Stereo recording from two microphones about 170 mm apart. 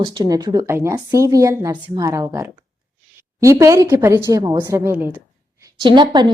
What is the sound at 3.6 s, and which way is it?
A woman's voice, 20° right (ahead or behind).